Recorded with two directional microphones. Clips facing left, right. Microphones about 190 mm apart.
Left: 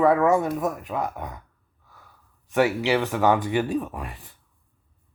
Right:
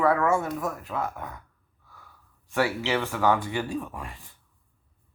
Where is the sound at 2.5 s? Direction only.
20° left (ahead or behind).